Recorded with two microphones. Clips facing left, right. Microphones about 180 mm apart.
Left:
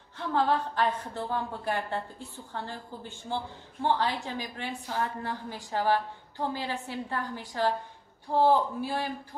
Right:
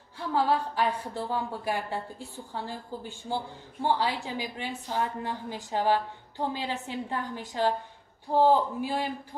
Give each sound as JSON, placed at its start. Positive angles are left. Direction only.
{"t": 0.2, "sound": "a woman's voice", "side_deg": -10}